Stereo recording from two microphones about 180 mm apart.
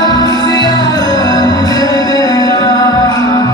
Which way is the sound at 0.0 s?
20° left (ahead or behind).